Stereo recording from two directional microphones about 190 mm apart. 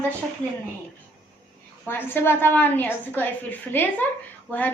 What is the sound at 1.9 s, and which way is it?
A woman's voice, 10° left (ahead or behind).